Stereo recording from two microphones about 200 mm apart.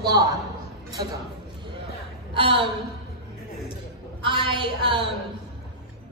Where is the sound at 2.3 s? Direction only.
25° right (ahead or behind).